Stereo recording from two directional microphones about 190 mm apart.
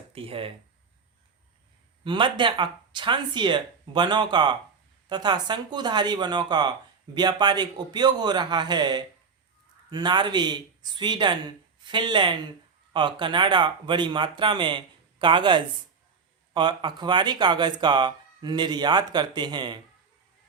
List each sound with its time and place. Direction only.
0.1 s speech: 30° right (ahead or behind)
2.0 s speech: 25° right (ahead or behind)